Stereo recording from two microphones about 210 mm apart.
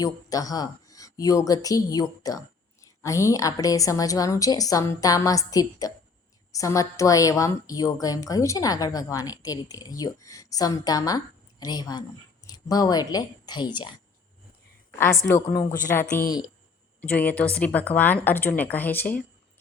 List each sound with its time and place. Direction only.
0.0 s a woman's voice: 15° left (ahead or behind)
14.9 s a woman's voice: 10° left (ahead or behind)
15.7 s a woman's voice: 40° left (ahead or behind)
17.0 s a woman's voice: 5° left (ahead or behind)